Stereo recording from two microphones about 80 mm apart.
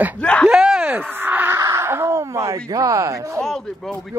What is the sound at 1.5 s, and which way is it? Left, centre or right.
Speech, right.